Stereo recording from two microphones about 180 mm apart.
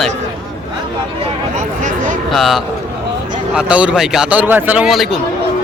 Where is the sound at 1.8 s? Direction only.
45° right (ahead or behind).